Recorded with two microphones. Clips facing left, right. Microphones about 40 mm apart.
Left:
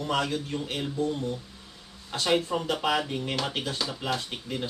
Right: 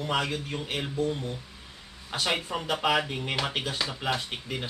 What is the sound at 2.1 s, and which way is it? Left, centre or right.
Speech, right.